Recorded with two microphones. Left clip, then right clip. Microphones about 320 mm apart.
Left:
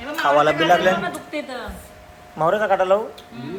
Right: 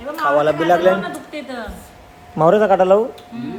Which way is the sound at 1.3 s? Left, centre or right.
Centre.